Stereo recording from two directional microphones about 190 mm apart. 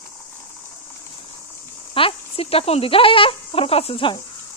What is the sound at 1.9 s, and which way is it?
Speech, 30° left (ahead or behind).